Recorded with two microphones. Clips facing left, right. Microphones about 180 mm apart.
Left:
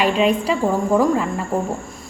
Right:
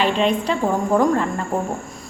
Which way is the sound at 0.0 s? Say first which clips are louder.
Left 2 dB; 10° left (ahead or behind).